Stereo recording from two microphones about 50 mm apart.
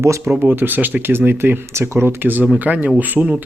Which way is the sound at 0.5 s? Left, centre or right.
Right.